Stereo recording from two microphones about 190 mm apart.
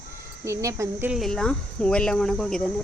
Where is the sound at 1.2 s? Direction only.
5° left (ahead or behind).